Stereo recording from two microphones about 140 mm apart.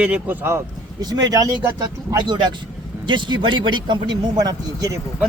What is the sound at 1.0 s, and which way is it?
Speech, 30° right (ahead or behind).